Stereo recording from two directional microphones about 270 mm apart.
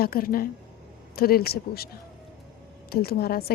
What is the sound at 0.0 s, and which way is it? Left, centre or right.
A woman's voice, left.